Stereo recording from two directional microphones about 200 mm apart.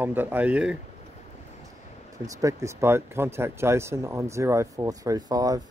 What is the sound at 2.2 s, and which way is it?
Speech, 15° right (ahead or behind).